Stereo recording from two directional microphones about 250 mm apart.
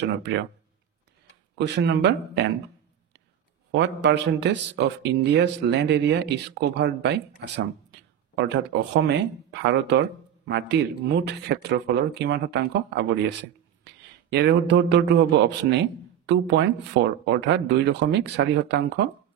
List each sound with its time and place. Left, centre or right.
0.0 s speech: right
1.6 s speech: right
3.7 s speech: right